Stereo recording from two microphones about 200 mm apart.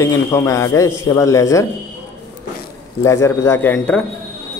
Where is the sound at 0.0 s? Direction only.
15° left (ahead or behind).